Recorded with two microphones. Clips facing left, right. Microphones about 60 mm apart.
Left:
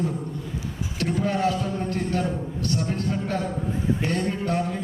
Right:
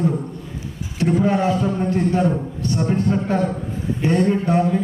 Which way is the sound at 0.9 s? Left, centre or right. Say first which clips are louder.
Right 7 dB; centre.